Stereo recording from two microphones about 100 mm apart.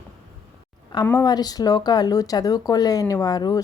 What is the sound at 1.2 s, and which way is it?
A woman's voice, 45° left (ahead or behind).